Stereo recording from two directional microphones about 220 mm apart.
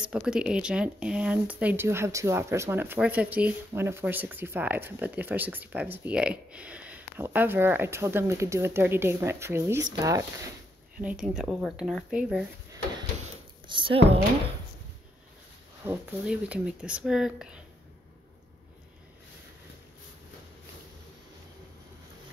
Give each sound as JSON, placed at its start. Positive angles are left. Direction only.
{"t": 0.0, "sound": "speech", "side_deg": -5}
{"t": 13.2, "sound": "a sound", "side_deg": -20}
{"t": 15.8, "sound": "speech", "side_deg": -10}